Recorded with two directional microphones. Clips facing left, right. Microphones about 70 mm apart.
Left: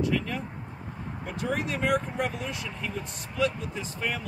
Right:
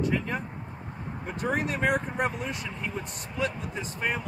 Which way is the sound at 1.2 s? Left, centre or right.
Right.